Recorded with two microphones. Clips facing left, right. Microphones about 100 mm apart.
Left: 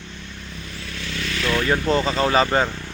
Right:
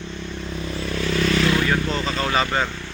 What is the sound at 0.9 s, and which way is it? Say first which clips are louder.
Vehicle: right 9 dB; 45° right (ahead or behind).